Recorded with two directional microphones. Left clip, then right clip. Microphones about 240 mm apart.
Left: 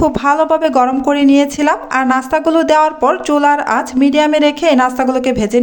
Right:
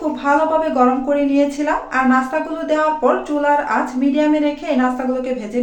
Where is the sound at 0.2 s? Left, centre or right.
Left.